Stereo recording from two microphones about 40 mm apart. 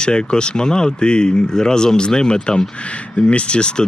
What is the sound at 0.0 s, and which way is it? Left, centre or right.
Speech, left.